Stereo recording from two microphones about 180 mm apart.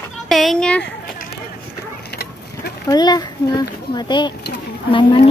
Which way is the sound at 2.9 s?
20° left (ahead or behind).